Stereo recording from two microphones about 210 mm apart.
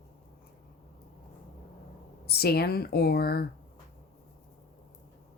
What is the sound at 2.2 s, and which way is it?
Speech, 50° left (ahead or behind).